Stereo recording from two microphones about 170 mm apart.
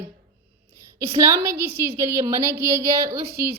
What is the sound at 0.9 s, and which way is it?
Speech, 15° right (ahead or behind).